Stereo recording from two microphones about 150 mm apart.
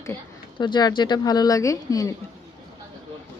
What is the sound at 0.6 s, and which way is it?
Speech, 30° left (ahead or behind).